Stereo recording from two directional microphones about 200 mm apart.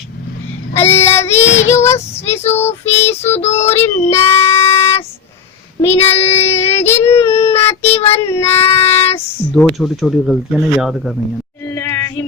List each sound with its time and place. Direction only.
0.7 s child singing: 10° left (ahead or behind)
1.5 s child singing: 65° left (ahead or behind)
1.7 s child singing: 15° left (ahead or behind)
2.4 s child singing: 35° left (ahead or behind)
3.0 s child singing: 10° left (ahead or behind)
3.3 s child singing: 30° left (ahead or behind)
3.8 s child singing: 10° left (ahead or behind)
7.3 s child singing: 30° left (ahead or behind)
7.5 s child singing: 10° left (ahead or behind)
7.8 s child singing: 30° left (ahead or behind)
8.3 s child singing: 10° left (ahead or behind)
9.0 s speech: 10° left (ahead or behind)
9.7 s speech: centre (ahead or behind)
11.6 s music: 15° left (ahead or behind)